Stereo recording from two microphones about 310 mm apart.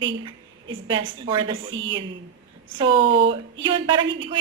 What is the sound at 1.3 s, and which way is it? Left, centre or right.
Speech, centre.